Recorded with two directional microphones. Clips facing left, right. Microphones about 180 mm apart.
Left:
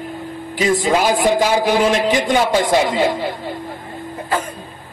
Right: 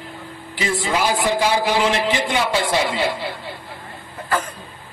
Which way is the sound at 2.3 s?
45° left (ahead or behind).